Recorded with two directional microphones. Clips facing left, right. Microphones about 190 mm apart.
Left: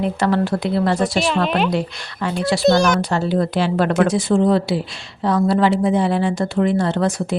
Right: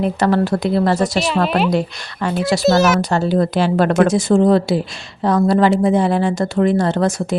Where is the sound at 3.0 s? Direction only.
45° right (ahead or behind).